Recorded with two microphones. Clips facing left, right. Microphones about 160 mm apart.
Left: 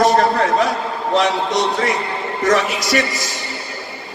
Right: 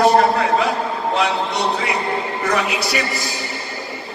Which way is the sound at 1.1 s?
40° left (ahead or behind).